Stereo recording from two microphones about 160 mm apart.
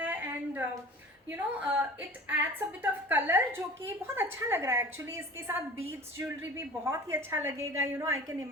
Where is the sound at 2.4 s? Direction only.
10° right (ahead or behind).